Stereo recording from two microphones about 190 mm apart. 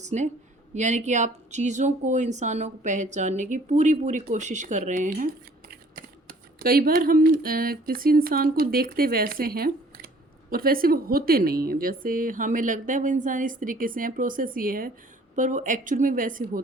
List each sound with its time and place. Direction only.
0.0 s a woman's voice: 40° right (ahead or behind)